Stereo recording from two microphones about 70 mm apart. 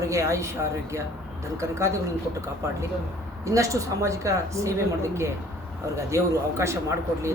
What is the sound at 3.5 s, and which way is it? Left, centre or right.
Speech, right.